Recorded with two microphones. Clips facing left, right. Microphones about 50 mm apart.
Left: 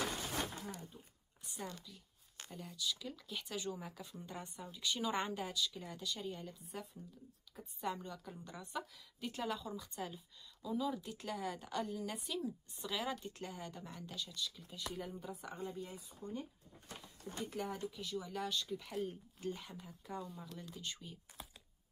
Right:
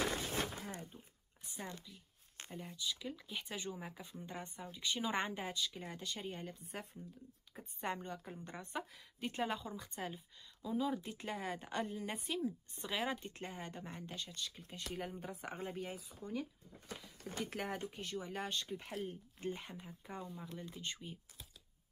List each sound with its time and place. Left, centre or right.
1.4 s speech: right
17.5 s speech: right